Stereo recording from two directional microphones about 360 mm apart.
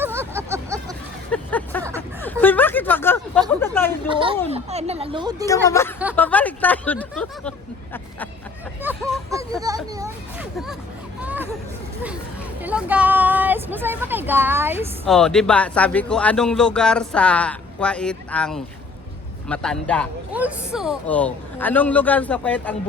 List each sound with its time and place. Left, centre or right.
0.0 s vehicle: centre
1.3 s vehicle: centre
2.0 s a sound: centre
3.6 s speech: centre
4.1 s speech: centre
5.6 s speech: centre
8.8 s a sound: centre
11.2 s hubbub: centre
12.6 s speech: centre